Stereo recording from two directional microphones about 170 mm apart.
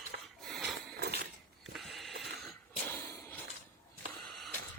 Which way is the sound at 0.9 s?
65° right (ahead or behind).